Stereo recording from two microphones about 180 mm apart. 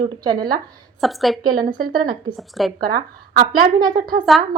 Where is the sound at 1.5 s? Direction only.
50° right (ahead or behind).